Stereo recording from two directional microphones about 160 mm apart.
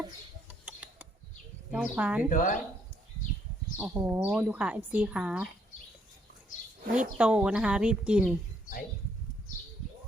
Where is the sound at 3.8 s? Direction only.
10° right (ahead or behind).